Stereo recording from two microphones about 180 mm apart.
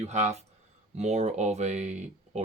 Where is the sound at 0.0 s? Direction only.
40° right (ahead or behind).